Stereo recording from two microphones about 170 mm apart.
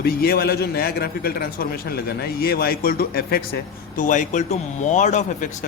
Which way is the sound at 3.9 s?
50° left (ahead or behind).